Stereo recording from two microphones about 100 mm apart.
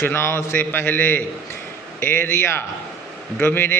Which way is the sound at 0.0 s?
25° left (ahead or behind).